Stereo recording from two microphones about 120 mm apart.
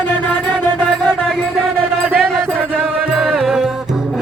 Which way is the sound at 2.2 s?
5° left (ahead or behind).